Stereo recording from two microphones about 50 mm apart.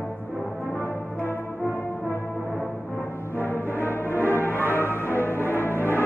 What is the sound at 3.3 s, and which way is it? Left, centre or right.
Music, left.